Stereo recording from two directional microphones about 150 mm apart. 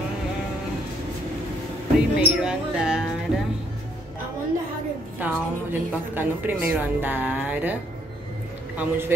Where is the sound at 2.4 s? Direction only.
5° right (ahead or behind).